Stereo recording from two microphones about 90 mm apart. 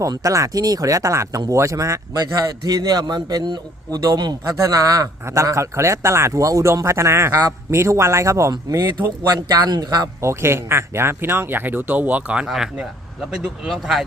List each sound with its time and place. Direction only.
0.1 s speech: 40° right (ahead or behind)
2.1 s a man's voice: 50° right (ahead or behind)
9.6 s a man's voice: 50° right (ahead or behind)
10.2 s speech: 30° right (ahead or behind); by 14.0 s 5° right (ahead or behind)